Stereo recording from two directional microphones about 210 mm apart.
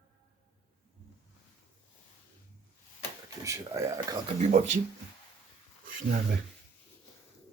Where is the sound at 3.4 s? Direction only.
15° right (ahead or behind).